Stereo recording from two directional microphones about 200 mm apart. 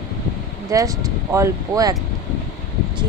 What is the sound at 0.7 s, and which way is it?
Speech, 15° right (ahead or behind).